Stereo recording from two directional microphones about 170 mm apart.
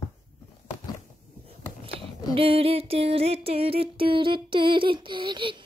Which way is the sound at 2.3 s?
30° right (ahead or behind).